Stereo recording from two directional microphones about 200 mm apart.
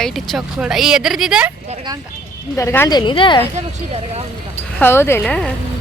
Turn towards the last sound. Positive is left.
turn(degrees=5)  # may be behind; listen again after turning